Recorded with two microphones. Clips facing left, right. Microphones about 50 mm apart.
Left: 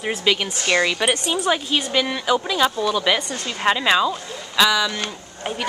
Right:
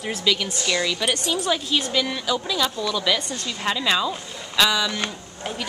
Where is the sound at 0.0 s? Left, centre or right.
Left.